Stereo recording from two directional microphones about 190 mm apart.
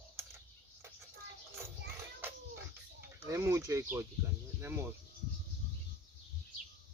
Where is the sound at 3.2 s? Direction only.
15° right (ahead or behind).